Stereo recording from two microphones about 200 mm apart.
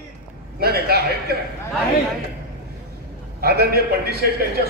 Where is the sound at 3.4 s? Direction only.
55° right (ahead or behind).